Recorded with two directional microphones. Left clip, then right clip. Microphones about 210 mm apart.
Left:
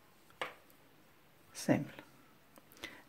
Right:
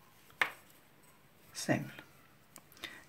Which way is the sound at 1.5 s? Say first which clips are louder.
Left 1 dB; 40° left (ahead or behind).